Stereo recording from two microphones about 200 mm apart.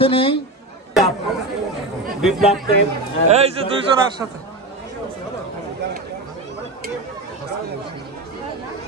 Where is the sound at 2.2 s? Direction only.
Centre (ahead or behind).